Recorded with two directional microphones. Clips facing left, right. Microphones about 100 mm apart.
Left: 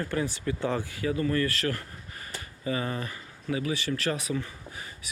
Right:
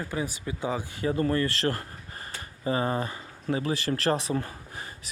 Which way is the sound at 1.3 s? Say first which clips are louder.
Right 1 dB; 30° right (ahead or behind).